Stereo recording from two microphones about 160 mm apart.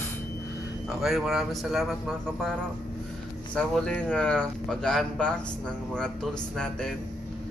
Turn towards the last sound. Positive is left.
turn(degrees=5)  # may be behind; listen again after turning